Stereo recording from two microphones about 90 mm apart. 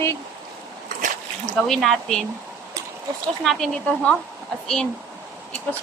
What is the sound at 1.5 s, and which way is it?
Speech, 5° left (ahead or behind).